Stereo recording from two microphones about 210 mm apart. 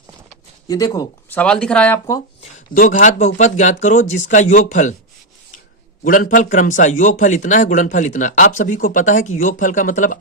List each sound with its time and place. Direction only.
0.7 s speech: 20° left (ahead or behind)
1.4 s speech: 5° left (ahead or behind)
2.4 s a man's voice: 40° left (ahead or behind)
6.1 s a man's voice: 40° left (ahead or behind)